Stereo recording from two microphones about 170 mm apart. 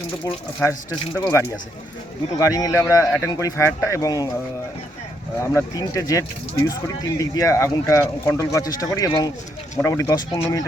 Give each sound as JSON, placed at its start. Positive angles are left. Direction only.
{"t": 1.1, "sound": "speech", "side_deg": 15}
{"t": 2.4, "sound": "speech", "side_deg": 20}
{"t": 5.4, "sound": "speech", "side_deg": 20}